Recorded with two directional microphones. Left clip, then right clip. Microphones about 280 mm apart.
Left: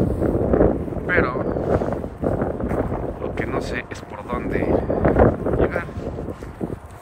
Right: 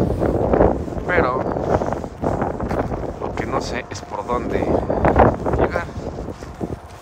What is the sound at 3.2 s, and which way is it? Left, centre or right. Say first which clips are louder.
Vehicle: right 3 dB; centre.